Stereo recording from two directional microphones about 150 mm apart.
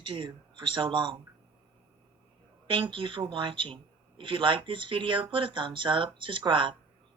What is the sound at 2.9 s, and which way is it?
Speech, 35° right (ahead or behind).